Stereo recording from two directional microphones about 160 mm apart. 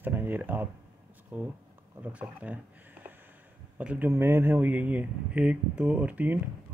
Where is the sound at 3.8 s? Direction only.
10° right (ahead or behind).